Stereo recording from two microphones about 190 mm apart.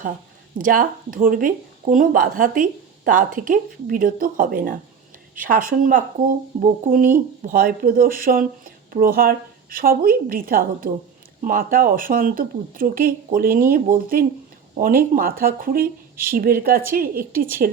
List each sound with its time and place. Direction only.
0.6 s speech: 45° right (ahead or behind)